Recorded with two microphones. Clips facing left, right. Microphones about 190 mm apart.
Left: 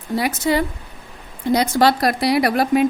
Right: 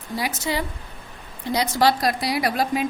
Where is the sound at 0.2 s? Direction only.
50° left (ahead or behind).